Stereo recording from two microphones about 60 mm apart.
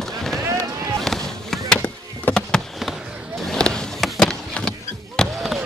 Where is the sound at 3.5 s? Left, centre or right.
Centre.